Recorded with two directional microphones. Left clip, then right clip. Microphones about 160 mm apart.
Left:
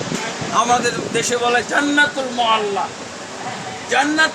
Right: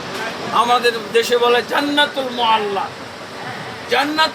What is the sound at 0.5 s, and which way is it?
A man's voice, 5° right (ahead or behind).